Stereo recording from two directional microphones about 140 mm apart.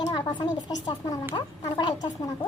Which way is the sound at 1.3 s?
30° left (ahead or behind).